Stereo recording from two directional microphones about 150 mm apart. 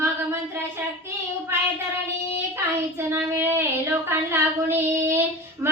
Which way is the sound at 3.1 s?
15° right (ahead or behind).